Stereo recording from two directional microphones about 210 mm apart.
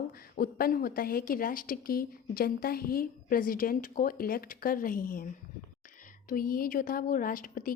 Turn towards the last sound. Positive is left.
turn(degrees=40)  # may be behind; listen again after turning